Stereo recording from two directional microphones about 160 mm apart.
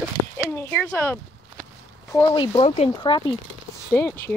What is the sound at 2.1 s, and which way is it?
Speech, 30° left (ahead or behind).